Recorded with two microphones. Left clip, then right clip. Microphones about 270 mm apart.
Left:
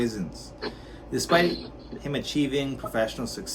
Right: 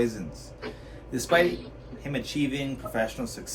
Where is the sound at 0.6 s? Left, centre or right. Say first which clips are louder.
Left 4 dB; left.